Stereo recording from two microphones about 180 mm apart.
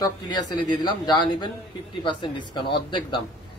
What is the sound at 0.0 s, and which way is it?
A man's voice, 20° left (ahead or behind).